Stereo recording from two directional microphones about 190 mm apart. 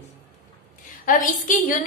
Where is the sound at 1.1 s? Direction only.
45° left (ahead or behind).